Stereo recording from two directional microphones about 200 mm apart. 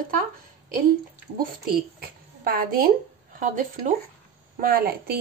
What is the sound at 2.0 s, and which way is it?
A woman's voice, 45° right (ahead or behind).